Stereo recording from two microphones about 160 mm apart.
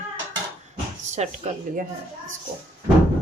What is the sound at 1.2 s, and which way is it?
Speech, 45° right (ahead or behind).